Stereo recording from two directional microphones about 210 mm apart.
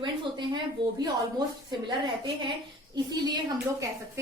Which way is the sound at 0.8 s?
20° right (ahead or behind).